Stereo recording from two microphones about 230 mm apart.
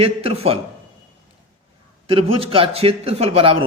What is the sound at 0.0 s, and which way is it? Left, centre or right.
Speech, right.